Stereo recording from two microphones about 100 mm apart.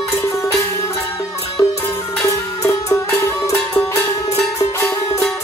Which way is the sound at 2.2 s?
30° left (ahead or behind).